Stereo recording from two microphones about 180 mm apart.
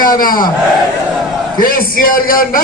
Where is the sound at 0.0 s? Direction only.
50° left (ahead or behind).